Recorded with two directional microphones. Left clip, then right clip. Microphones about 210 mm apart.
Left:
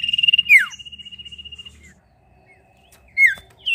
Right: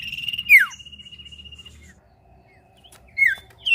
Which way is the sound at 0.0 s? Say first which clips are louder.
Left 11 dB; centre (ahead or behind).